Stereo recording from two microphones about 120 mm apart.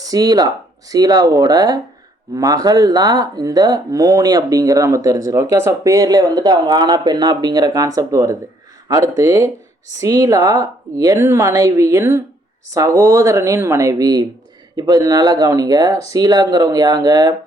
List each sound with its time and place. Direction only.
0.0 s speech: 30° right (ahead or behind)